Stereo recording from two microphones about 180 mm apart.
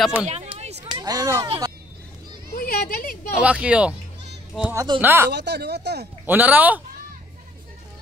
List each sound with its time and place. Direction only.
0.0 s speech: 5° right (ahead or behind)
0.3 s a sound: 35° right (ahead or behind)
0.9 s speech: 20° right (ahead or behind)
2.5 s speech: 50° left (ahead or behind)
3.3 s speech: 5° right (ahead or behind)
5.3 s speech: 70° right (ahead or behind)
6.2 s speech: 10° right (ahead or behind)